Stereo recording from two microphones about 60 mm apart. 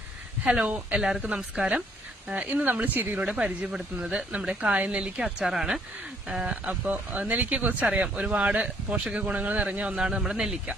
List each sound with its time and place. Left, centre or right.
0.4 s speech: centre
0.9 s speech: centre
2.3 s speech: right
3.3 s speech: centre
5.5 s speech: centre
6.8 s speech: right; by 10.8 s centre